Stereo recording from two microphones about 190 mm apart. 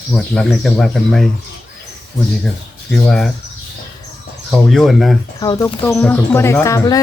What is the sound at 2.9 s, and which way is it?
Speech, centre (ahead or behind).